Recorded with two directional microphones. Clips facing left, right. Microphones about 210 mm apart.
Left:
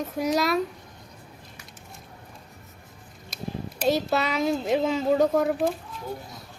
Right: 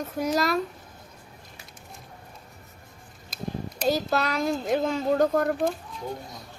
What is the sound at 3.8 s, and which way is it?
Speech, centre (ahead or behind).